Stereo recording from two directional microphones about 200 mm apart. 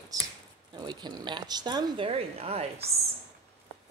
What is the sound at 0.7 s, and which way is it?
Speech, 20° right (ahead or behind).